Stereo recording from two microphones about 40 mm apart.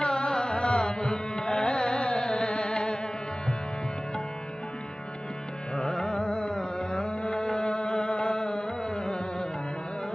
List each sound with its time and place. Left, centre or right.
0.0 s carnatic music: left
5.7 s carnatic music: centre